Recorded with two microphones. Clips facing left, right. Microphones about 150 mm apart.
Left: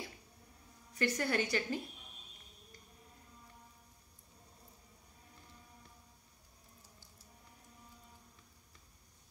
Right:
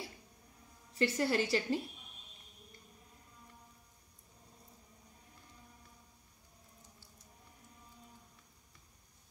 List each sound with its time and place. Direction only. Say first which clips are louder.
0.9 s a woman's voice: right 2 dB; 25° right (ahead or behind)